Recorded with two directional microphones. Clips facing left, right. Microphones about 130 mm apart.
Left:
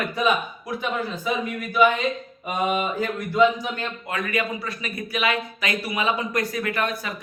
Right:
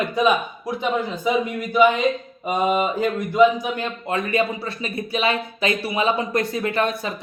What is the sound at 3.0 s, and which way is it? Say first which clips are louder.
Speech: right 3 dB; 15° right (ahead or behind).